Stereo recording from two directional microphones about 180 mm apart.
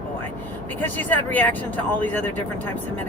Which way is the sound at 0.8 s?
10° left (ahead or behind).